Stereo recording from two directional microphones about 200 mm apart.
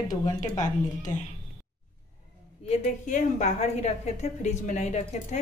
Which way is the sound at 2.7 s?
35° left (ahead or behind).